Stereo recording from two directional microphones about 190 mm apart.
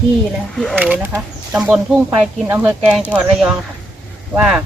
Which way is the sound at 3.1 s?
5° right (ahead or behind).